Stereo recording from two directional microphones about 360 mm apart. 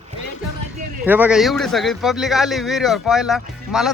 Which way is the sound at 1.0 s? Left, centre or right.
Centre.